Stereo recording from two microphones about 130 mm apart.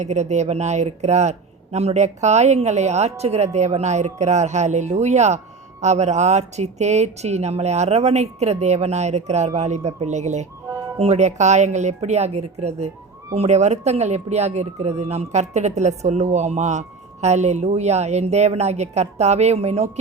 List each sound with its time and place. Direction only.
0.0 s speech: 60° right (ahead or behind)